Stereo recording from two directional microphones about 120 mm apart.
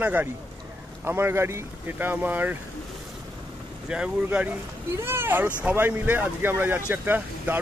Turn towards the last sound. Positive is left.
turn(degrees=-15)  # may be behind; listen again after turning